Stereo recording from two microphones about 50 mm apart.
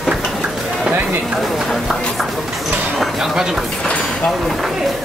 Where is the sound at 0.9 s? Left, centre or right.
Right.